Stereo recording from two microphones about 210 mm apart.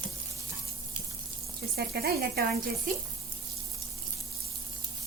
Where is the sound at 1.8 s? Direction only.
50° right (ahead or behind).